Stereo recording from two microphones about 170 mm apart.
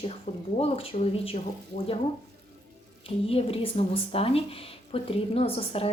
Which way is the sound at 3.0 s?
35° left (ahead or behind).